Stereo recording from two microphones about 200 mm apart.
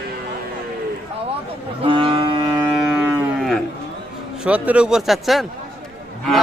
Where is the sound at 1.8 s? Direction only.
25° right (ahead or behind).